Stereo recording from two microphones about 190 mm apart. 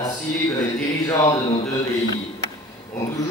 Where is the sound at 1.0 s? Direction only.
15° left (ahead or behind).